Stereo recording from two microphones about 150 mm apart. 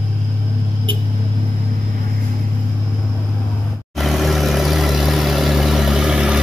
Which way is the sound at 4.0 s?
Centre (ahead or behind).